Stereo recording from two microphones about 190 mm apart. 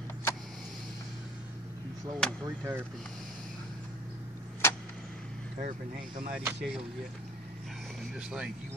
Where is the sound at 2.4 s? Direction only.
15° right (ahead or behind).